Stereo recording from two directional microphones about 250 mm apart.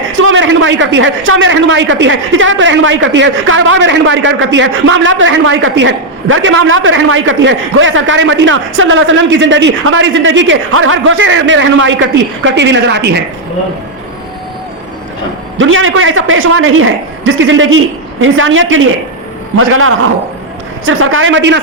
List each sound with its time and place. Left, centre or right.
0.1 s a man's voice: right
15.5 s a man's voice: right